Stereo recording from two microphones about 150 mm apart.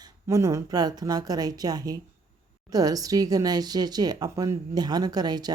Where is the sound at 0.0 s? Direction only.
20° right (ahead or behind).